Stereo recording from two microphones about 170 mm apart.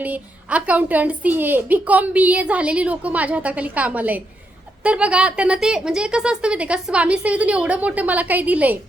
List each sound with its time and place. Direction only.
0.0 s a woman's voice: 10° right (ahead or behind)